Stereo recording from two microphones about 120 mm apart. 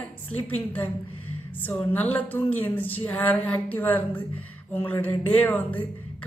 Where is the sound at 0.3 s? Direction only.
15° left (ahead or behind).